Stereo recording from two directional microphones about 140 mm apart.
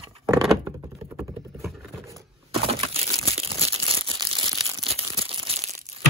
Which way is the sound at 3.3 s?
45° right (ahead or behind).